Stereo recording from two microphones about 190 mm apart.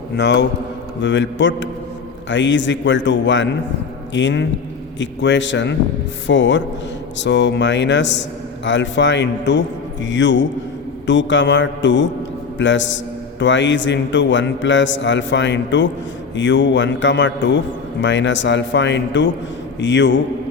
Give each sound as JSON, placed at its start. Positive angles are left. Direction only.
{"t": 0.2, "sound": "a man's voice", "side_deg": 65}